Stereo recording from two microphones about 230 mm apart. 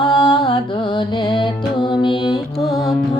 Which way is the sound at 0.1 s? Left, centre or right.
Centre.